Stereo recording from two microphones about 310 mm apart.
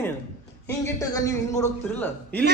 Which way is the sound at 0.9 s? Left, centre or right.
Centre.